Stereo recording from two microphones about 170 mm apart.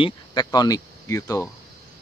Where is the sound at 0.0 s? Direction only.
25° left (ahead or behind).